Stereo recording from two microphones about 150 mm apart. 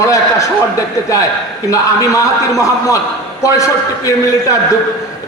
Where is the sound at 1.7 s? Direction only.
20° left (ahead or behind).